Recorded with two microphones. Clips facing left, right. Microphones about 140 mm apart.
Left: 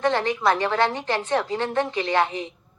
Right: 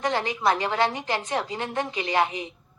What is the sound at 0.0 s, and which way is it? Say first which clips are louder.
A woman's voice: left 3 dB; 15° right (ahead or behind).